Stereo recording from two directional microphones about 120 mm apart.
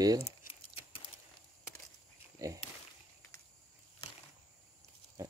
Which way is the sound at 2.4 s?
30° right (ahead or behind).